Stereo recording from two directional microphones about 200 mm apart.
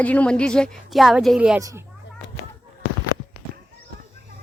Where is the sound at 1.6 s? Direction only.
15° right (ahead or behind).